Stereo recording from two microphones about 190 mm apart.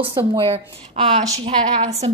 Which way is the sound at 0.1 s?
25° right (ahead or behind).